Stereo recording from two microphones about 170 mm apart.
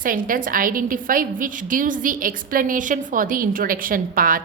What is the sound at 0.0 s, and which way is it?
A woman's voice, 55° right (ahead or behind).